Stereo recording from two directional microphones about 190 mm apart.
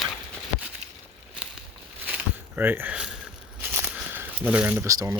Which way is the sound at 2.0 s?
10° right (ahead or behind).